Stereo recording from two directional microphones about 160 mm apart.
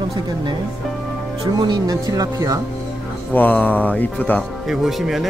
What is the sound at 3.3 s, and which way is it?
Speech, 10° left (ahead or behind).